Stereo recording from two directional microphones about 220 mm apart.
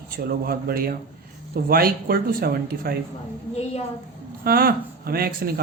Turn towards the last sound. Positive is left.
turn(degrees=-45)  # may be behind; listen again after turning